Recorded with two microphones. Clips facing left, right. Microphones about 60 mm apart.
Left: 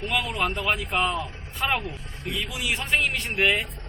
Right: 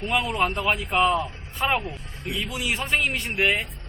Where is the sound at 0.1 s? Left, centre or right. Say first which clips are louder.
Right 3 dB; centre.